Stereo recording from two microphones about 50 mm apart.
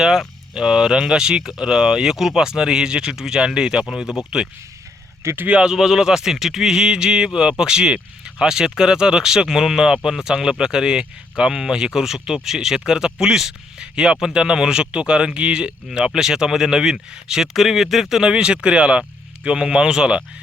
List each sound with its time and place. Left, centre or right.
0.0 s speech: centre
5.5 s speech: centre
5.7 s speech: centre
18.2 s speech: centre